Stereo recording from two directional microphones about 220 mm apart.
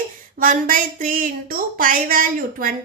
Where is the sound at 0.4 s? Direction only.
40° right (ahead or behind).